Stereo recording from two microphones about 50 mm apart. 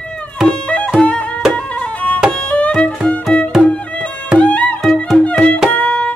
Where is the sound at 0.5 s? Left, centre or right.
Left.